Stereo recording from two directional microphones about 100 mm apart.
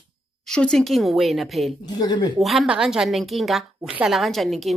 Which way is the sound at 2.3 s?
Centre (ahead or behind).